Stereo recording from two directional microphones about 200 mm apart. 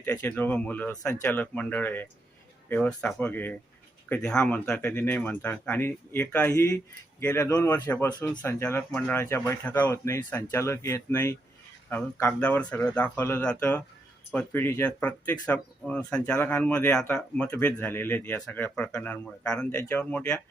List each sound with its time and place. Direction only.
0.0 s speech: 10° left (ahead or behind)